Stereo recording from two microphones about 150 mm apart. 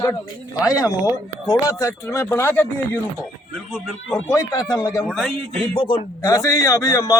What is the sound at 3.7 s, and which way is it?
Speech, 5° right (ahead or behind).